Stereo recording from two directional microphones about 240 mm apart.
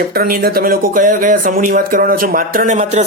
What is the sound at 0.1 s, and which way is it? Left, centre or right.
Speech, right.